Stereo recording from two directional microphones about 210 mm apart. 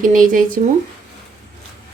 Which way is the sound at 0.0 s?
40° right (ahead or behind).